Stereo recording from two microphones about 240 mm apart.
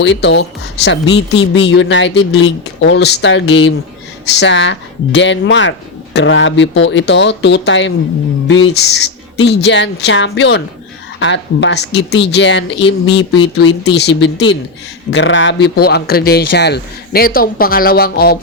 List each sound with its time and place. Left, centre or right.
0.0 s speech: left
12.8 s speech: left
13.9 s speech: left